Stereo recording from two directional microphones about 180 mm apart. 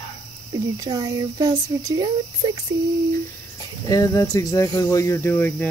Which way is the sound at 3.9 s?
20° left (ahead or behind).